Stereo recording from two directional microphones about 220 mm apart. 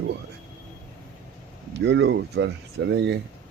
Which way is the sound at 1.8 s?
50° right (ahead or behind).